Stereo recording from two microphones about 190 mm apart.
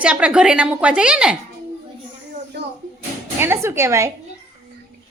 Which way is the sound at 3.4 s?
10° right (ahead or behind).